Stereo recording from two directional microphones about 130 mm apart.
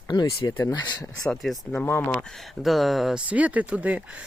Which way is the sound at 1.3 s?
Centre (ahead or behind).